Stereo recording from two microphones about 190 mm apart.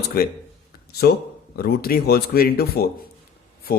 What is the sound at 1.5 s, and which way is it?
Speech, 55° left (ahead or behind).